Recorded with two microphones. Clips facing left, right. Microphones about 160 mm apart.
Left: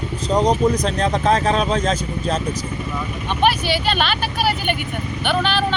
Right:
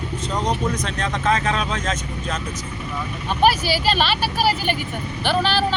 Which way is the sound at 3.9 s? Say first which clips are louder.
Right 2 dB; centre (ahead or behind).